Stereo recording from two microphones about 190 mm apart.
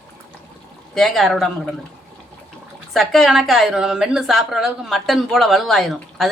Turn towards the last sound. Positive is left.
turn(degrees=0)  # may be behind; listen again after turning